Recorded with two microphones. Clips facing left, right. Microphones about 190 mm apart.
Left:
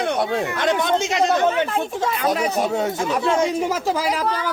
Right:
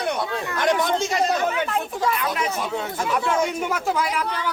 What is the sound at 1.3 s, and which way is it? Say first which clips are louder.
A man's voice: left 4 dB; 25° left (ahead or behind).